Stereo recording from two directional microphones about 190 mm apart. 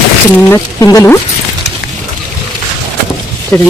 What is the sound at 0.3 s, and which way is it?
Speech, 15° left (ahead or behind).